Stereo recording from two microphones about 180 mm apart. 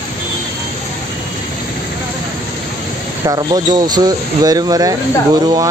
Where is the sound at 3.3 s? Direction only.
20° right (ahead or behind).